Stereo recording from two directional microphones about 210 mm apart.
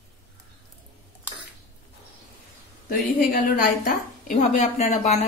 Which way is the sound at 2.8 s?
45° left (ahead or behind).